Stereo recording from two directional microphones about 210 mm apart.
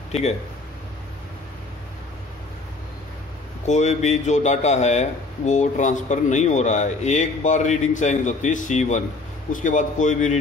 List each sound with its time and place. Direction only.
0.1 s speech: 30° left (ahead or behind)
3.6 s speech: 35° left (ahead or behind)